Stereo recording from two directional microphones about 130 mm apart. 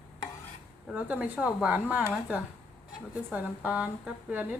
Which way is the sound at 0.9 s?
10° right (ahead or behind).